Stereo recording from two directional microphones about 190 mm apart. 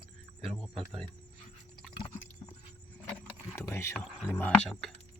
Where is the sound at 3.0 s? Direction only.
10° left (ahead or behind).